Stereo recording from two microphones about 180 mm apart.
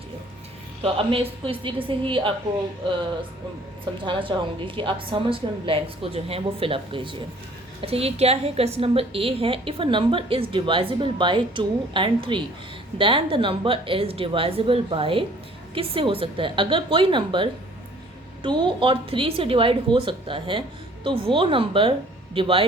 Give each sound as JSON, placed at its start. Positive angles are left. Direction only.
{"t": 0.8, "sound": "a woman's voice", "side_deg": -30}
{"t": 4.0, "sound": "a woman's voice", "side_deg": -25}